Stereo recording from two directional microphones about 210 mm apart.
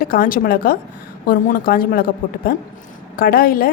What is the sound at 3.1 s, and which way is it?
Speech, 45° left (ahead or behind).